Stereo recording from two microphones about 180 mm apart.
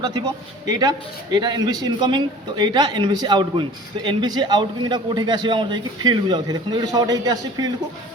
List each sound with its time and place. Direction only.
0.0 s a man's voice: 20° right (ahead or behind)